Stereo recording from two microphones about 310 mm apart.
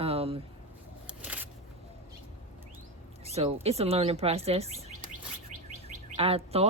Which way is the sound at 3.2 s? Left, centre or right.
Centre.